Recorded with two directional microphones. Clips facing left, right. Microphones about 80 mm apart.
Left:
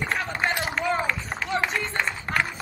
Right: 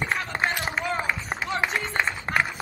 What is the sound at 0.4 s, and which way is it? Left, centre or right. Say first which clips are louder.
Run: left 1 dB; centre.